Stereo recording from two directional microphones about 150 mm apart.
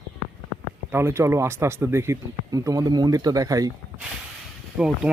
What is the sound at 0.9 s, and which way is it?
Speech, 15° right (ahead or behind).